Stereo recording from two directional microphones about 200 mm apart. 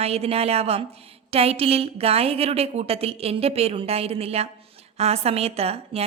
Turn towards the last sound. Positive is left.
turn(degrees=-30)  # may be behind; listen again after turning